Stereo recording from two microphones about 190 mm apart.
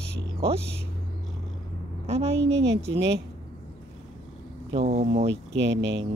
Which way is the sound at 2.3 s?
65° right (ahead or behind).